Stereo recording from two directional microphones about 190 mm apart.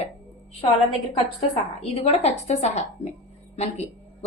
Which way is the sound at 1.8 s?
35° left (ahead or behind).